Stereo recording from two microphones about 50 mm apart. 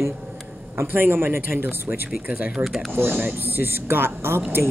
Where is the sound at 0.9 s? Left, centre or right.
Right.